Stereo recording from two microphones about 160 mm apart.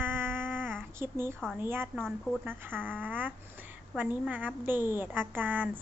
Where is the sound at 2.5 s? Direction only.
15° right (ahead or behind).